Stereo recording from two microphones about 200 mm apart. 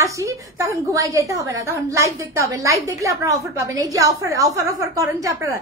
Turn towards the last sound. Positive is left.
turn(degrees=-15)  # may be behind; listen again after turning